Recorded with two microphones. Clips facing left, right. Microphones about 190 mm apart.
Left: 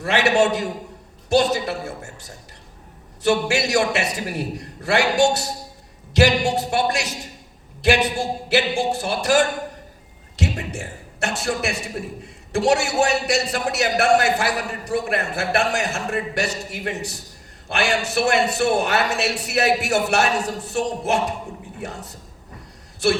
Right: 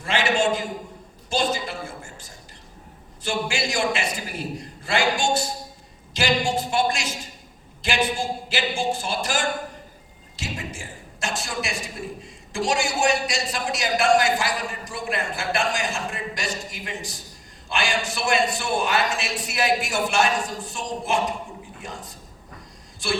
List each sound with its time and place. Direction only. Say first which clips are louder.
0.0 s a man's voice: left 4 dB; 65° left (ahead or behind)